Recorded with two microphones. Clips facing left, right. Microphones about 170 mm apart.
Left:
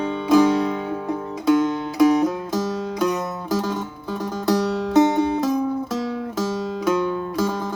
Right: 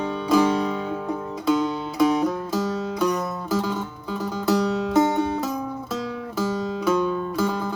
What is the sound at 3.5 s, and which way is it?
Music, 10° left (ahead or behind).